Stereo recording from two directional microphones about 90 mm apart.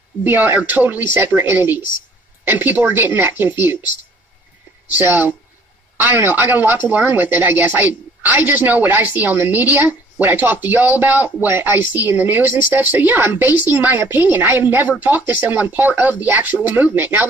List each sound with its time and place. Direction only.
0.2 s a woman's voice: 20° right (ahead or behind)
4.9 s a woman's voice: 20° right (ahead or behind)